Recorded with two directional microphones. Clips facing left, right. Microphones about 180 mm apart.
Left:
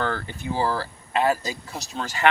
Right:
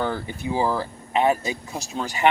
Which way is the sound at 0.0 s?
15° right (ahead or behind).